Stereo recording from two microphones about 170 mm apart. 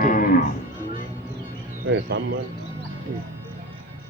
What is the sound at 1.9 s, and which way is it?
Speech, 90° right.